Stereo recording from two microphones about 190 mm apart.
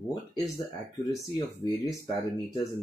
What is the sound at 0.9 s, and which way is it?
Speech, 20° left (ahead or behind).